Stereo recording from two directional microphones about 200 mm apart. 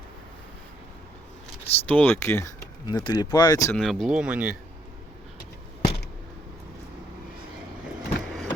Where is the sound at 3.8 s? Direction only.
Centre (ahead or behind).